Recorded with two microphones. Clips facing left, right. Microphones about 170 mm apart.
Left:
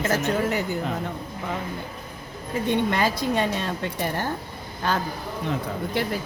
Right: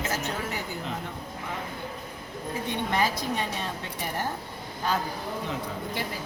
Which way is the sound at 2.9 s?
70° left (ahead or behind).